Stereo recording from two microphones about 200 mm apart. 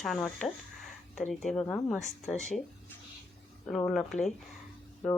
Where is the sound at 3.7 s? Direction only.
5° left (ahead or behind).